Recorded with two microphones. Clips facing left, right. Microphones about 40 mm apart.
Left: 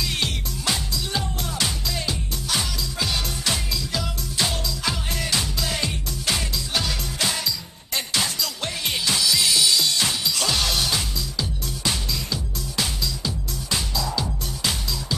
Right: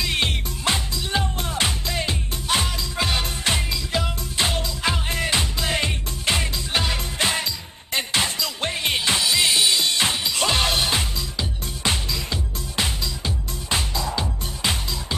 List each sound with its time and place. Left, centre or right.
0.0 s music: right